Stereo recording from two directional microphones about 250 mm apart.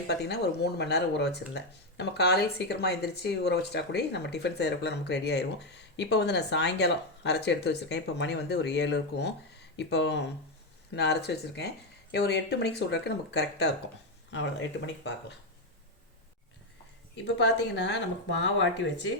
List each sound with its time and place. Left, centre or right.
0.1 s speech: left
17.2 s speech: left